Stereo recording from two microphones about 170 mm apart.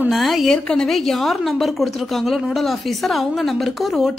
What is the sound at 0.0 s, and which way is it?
A woman's voice, centre (ahead or behind).